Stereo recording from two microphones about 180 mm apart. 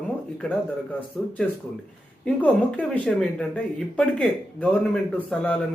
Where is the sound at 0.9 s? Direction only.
10° left (ahead or behind).